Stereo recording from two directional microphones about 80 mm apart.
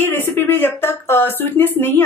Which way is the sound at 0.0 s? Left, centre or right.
Left.